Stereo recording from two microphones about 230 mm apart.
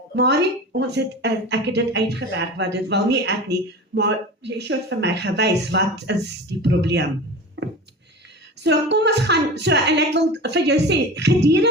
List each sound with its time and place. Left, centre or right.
0.2 s a woman's voice: right
7.6 s a sound: right
8.6 s a woman's voice: right